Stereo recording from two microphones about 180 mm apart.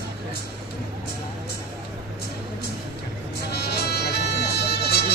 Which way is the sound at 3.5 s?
60° left (ahead or behind).